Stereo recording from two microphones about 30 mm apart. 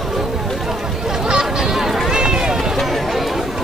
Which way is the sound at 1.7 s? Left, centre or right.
Right.